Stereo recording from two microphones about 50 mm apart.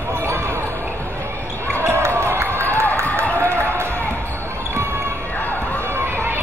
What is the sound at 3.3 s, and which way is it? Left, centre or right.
Run, right.